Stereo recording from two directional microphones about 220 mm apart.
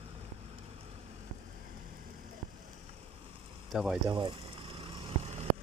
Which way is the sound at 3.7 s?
5° right (ahead or behind).